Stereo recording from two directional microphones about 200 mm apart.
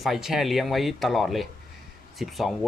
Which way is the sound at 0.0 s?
Centre (ahead or behind).